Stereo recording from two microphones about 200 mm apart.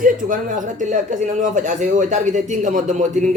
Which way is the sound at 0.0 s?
40° right (ahead or behind).